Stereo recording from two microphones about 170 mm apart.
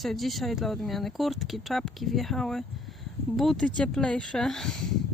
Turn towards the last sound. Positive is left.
turn(degrees=0)  # may be behind; listen again after turning